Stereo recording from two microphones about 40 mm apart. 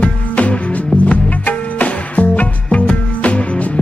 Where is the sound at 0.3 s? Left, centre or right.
Left.